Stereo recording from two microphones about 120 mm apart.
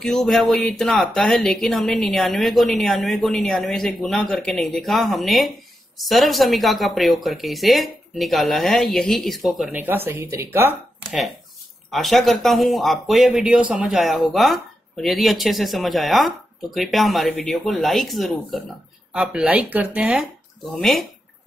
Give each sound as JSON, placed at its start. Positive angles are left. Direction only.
{"t": 0.0, "sound": "speech", "side_deg": 5}
{"t": 9.7, "sound": "speech", "side_deg": -15}
{"t": 11.0, "sound": "speech", "side_deg": -5}